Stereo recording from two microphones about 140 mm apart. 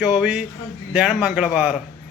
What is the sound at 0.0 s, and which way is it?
A man's voice, 5° right (ahead or behind).